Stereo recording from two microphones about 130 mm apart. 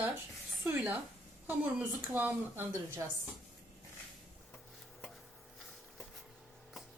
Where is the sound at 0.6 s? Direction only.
20° right (ahead or behind).